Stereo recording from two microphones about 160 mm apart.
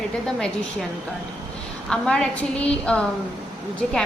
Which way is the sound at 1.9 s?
5° left (ahead or behind).